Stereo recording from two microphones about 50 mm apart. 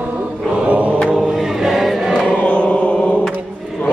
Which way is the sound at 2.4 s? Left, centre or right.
Left.